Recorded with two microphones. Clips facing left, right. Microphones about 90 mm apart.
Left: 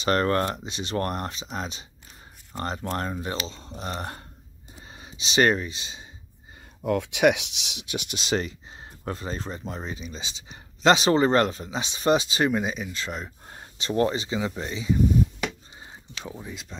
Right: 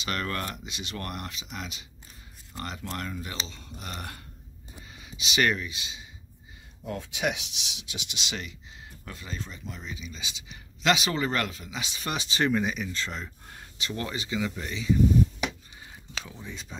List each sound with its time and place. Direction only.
0.0 s speech: 40° left (ahead or behind)
6.8 s speech: 65° left (ahead or behind); by 13.3 s 10° left (ahead or behind)
13.5 s speech: 30° left (ahead or behind)
15.8 s a sound: 30° left (ahead or behind)